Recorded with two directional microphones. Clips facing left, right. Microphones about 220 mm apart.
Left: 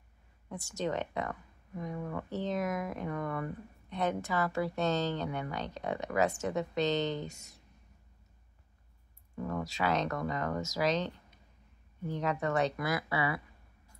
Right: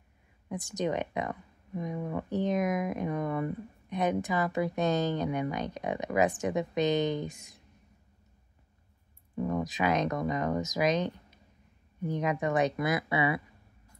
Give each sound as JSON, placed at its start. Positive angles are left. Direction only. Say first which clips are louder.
{"t": 0.5, "sound": "speech", "louder": "right 3 dB", "side_deg": -15}
{"t": 9.3, "sound": "speech", "louder": "right 5 dB", "side_deg": -15}